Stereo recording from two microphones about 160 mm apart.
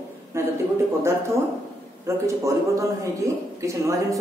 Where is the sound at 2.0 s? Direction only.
20° right (ahead or behind).